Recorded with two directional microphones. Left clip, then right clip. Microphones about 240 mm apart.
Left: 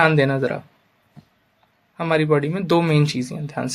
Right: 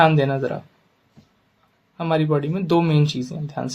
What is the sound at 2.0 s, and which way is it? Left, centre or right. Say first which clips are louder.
Speech: left 2 dB; left.